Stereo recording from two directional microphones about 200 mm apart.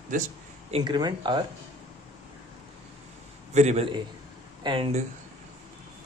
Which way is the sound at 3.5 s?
35° right (ahead or behind).